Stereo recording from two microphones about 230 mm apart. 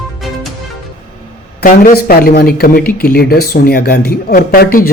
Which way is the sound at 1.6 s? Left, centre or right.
Left.